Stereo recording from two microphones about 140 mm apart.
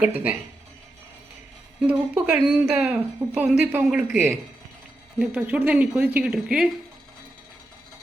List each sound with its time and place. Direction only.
0.0 s a woman's voice: 10° right (ahead or behind)
1.9 s a woman's voice: 5° right (ahead or behind)
5.2 s a woman's voice: 10° right (ahead or behind)